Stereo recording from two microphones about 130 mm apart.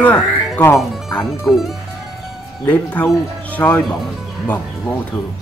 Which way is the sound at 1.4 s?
Centre (ahead or behind).